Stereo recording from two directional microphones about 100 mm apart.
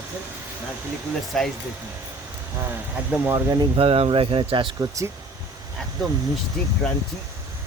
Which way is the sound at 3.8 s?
70° right (ahead or behind).